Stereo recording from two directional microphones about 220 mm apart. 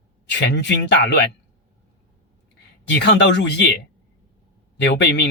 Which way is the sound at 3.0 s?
50° left (ahead or behind).